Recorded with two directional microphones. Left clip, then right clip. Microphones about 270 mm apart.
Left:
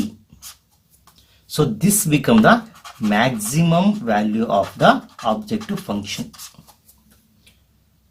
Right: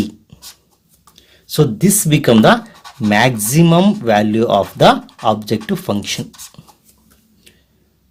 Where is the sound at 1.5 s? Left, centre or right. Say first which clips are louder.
Right 5 dB; right.